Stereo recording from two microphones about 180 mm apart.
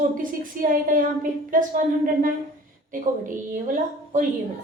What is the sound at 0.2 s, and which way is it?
A woman's voice, 50° right (ahead or behind).